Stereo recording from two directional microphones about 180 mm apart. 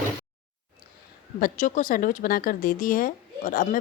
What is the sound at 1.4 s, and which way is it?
Speech, 45° left (ahead or behind).